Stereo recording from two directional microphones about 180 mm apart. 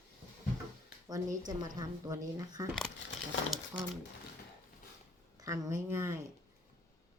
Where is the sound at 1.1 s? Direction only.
20° right (ahead or behind).